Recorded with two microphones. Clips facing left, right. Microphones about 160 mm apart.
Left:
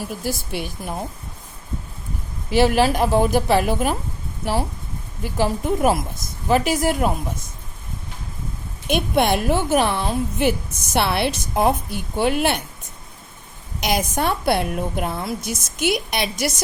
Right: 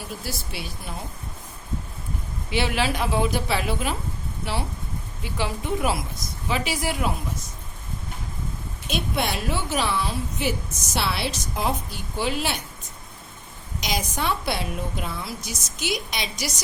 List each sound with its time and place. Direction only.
0.0 s a woman's voice: 50° left (ahead or behind)
2.5 s a woman's voice: 45° left (ahead or behind)
5.2 s a woman's voice: 45° left (ahead or behind)
8.9 s a woman's voice: 55° left (ahead or behind)
13.8 s a woman's voice: 55° left (ahead or behind)